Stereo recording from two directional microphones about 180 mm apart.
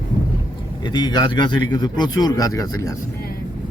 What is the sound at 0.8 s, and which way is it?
Speech, 25° left (ahead or behind).